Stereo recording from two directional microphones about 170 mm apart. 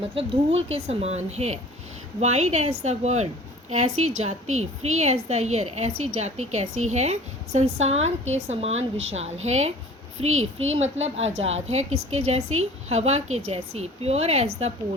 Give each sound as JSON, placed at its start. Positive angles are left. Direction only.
{"t": 0.1, "sound": "a woman's voice", "side_deg": -35}